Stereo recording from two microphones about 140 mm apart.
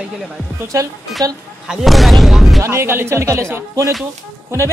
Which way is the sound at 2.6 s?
20° right (ahead or behind).